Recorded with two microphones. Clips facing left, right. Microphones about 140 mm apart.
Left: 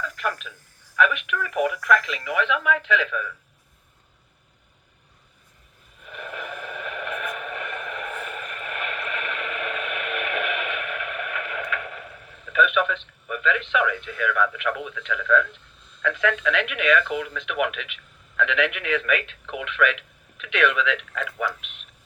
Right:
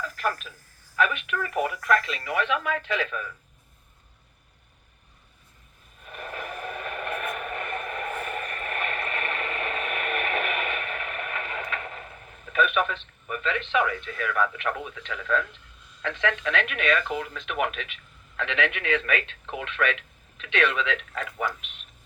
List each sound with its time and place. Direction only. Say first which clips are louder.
0.2 s speech: right 2 dB; 35° right (ahead or behind)
6.0 s a sound: left 1 dB; 40° right (ahead or behind)
12.5 s speech: left 3 dB; 40° right (ahead or behind)